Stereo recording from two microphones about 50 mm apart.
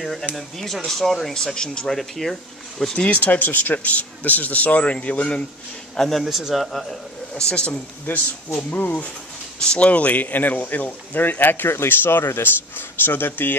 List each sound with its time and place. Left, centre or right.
0.0 s a man's voice: centre
3.0 s speech: left
5.9 s a man's voice: centre
7.3 s speech: centre
8.1 s speech: left
9.6 s speech: left